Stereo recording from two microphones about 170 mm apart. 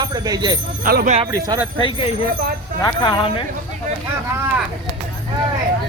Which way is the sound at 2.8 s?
25° left (ahead or behind).